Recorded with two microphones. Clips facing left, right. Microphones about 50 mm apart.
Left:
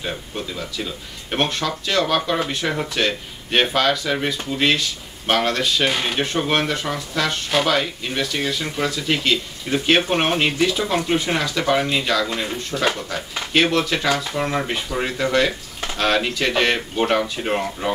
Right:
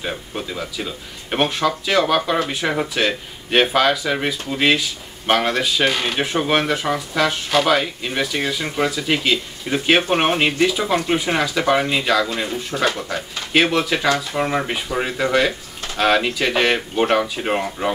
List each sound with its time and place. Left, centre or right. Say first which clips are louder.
0.0 s speech: right 1 dB; centre
12.7 s speech: right 1 dB; centre
13.1 s speech: right 1 dB; centre